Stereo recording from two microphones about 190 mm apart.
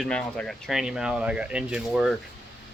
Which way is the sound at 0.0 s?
5° left (ahead or behind).